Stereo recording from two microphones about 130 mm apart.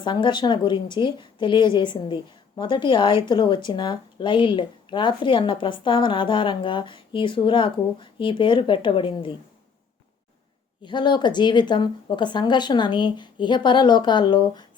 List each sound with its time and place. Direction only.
0.0 s a woman's voice: 35° left (ahead or behind)
10.8 s a woman's voice: 35° left (ahead or behind)